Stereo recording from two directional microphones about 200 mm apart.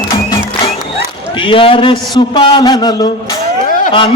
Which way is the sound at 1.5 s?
25° left (ahead or behind).